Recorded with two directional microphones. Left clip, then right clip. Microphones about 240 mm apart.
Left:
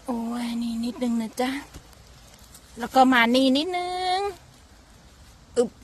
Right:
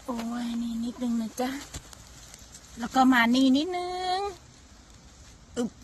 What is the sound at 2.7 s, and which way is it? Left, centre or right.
Speech, left.